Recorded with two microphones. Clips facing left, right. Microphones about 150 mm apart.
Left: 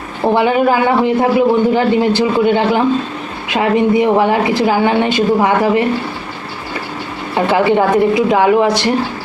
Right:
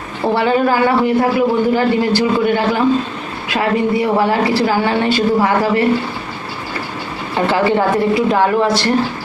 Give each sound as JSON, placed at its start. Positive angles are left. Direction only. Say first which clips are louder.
{"t": 0.3, "sound": "a man's voice", "louder": "left 1 dB", "side_deg": 20}
{"t": 7.3, "sound": "a woman's voice", "louder": "left 2 dB", "side_deg": 20}